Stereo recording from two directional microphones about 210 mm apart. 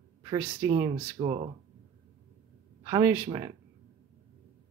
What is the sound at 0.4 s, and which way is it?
Speech, 15° right (ahead or behind).